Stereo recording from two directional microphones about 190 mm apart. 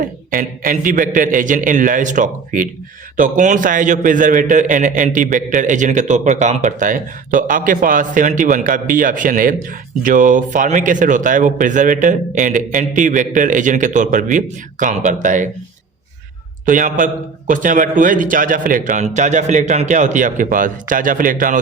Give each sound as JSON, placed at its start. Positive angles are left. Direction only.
{"t": 0.0, "sound": "a man's voice", "side_deg": -45}
{"t": 16.6, "sound": "a man's voice", "side_deg": -45}